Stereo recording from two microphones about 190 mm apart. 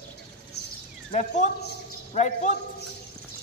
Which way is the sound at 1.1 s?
40° left (ahead or behind).